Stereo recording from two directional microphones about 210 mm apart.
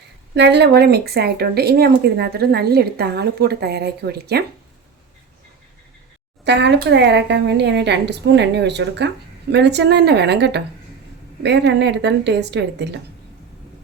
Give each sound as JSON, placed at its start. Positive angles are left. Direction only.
{"t": 0.3, "sound": "speech", "side_deg": -55}
{"t": 6.4, "sound": "a woman's voice", "side_deg": -55}